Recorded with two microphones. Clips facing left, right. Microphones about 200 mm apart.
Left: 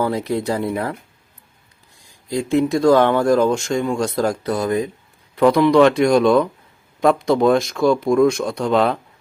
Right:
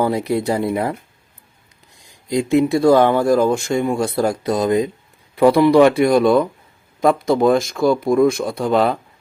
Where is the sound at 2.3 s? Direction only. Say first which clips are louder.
Right 2 dB; 15° right (ahead or behind).